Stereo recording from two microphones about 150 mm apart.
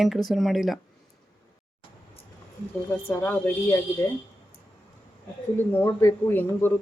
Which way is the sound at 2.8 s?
15° left (ahead or behind).